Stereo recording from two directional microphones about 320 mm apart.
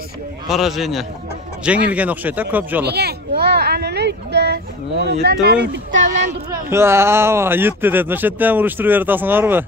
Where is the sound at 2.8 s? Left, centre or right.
Right.